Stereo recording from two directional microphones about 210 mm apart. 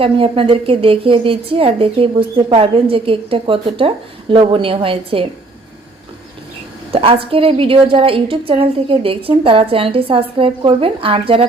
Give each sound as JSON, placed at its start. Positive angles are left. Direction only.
{"t": 0.0, "sound": "a woman's voice", "side_deg": -25}
{"t": 6.9, "sound": "a woman's voice", "side_deg": -25}